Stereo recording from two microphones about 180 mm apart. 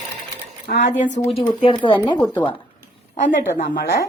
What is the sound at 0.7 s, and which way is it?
Speech, 50° left (ahead or behind).